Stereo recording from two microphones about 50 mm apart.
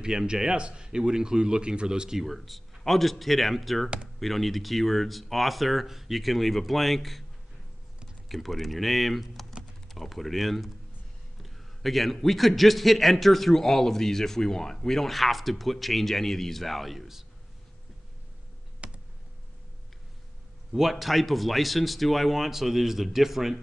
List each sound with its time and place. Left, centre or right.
0.0 s a man's voice: centre
8.3 s a man's voice: centre
18.8 s computer keyboard: right
20.7 s a man's voice: centre